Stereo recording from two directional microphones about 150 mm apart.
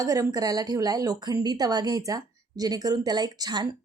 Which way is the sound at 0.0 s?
20° right (ahead or behind).